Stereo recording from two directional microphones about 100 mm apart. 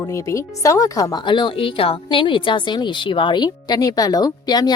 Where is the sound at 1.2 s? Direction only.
50° left (ahead or behind).